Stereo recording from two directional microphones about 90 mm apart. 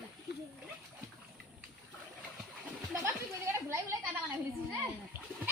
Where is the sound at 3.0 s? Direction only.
30° right (ahead or behind).